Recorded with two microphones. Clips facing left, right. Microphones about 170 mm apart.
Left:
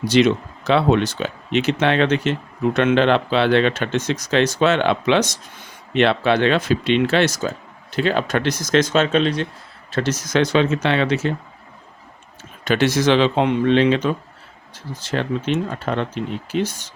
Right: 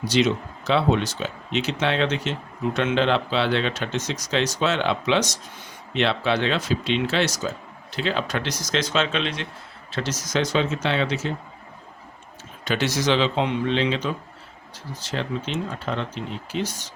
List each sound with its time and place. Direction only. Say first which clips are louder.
0.1 s speech: left 5 dB; 60° left (ahead or behind); by 9.5 s 40° left (ahead or behind)
9.9 s speech: left 6 dB; 55° left (ahead or behind)
12.6 s speech: left 6 dB; 55° left (ahead or behind)